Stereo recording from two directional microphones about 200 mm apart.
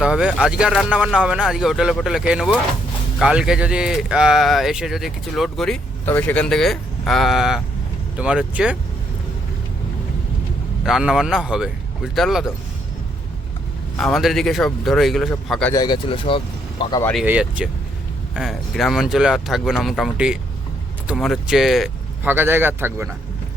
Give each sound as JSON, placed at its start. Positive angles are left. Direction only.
{"t": 0.0, "sound": "speech", "side_deg": -5}
{"t": 10.8, "sound": "speech", "side_deg": -5}
{"t": 13.9, "sound": "speech", "side_deg": 0}
{"t": 15.7, "sound": "speech", "side_deg": 20}
{"t": 17.0, "sound": "speech", "side_deg": 5}
{"t": 17.2, "sound": "speech", "side_deg": -5}